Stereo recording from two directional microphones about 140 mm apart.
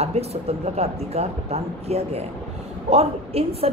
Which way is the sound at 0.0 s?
50° right (ahead or behind).